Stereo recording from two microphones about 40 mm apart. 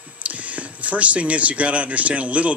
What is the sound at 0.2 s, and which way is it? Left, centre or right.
Speech, right.